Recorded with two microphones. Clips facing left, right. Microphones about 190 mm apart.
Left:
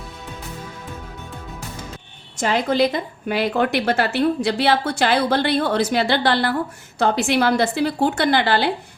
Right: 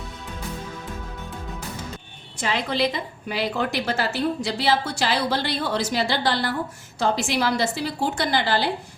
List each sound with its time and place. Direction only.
2.3 s a woman's voice: 45° left (ahead or behind); by 8.7 s 60° left (ahead or behind)